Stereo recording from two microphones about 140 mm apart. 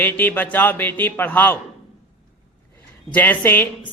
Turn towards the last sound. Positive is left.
turn(degrees=15)  # may be behind; listen again after turning